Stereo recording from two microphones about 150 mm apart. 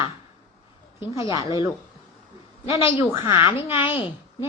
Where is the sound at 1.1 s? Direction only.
20° right (ahead or behind).